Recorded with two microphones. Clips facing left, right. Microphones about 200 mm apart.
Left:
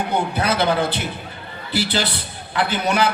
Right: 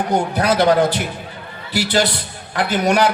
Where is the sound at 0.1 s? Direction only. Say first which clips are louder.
Right 5 dB; 45° right (ahead or behind).